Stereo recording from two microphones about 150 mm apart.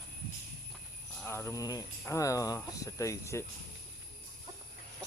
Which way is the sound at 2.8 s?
20° left (ahead or behind).